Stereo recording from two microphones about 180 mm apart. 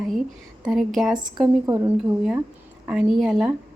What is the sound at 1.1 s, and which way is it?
A woman's voice, 20° right (ahead or behind).